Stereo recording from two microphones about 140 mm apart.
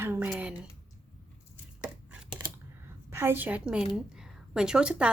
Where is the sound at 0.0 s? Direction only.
15° right (ahead or behind).